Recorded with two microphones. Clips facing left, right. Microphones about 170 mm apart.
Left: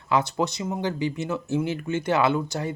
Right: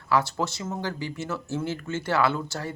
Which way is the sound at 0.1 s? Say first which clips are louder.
Left 2 dB; 20° left (ahead or behind).